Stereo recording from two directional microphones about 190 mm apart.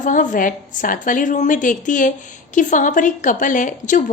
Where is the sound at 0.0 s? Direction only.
45° left (ahead or behind).